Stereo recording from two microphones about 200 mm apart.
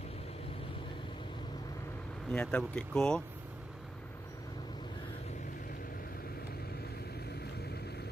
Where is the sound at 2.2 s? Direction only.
5° left (ahead or behind).